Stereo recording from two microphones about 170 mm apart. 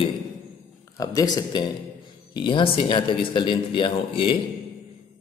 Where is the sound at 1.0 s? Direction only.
20° left (ahead or behind).